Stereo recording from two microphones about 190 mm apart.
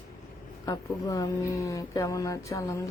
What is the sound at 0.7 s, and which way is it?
Speech, 20° left (ahead or behind).